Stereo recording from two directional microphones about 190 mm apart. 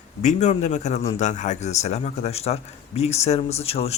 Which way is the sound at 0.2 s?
40° left (ahead or behind).